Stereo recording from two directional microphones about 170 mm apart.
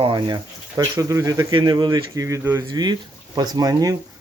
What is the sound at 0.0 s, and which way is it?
Speech, 30° right (ahead or behind).